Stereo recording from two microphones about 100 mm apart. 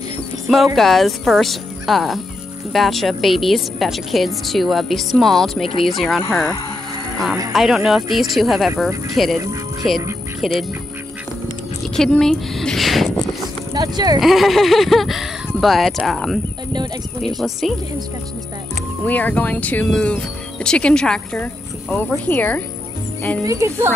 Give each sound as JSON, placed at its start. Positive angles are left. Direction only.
{"t": 0.7, "sound": "a woman's voice", "side_deg": 0}
{"t": 7.5, "sound": "a woman's voice", "side_deg": -5}
{"t": 12.0, "sound": "speech", "side_deg": 5}
{"t": 13.7, "sound": "speech", "side_deg": -40}
{"t": 14.2, "sound": "a woman's voice", "side_deg": 0}
{"t": 17.4, "sound": "a woman's voice", "side_deg": 0}
{"t": 19.0, "sound": "speech", "side_deg": 15}
{"t": 21.9, "sound": "speech", "side_deg": 20}
{"t": 23.4, "sound": "speech", "side_deg": -35}